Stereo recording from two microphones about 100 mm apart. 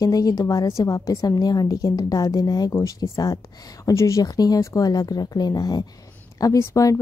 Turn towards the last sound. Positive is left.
turn(degrees=35)  # may be behind; listen again after turning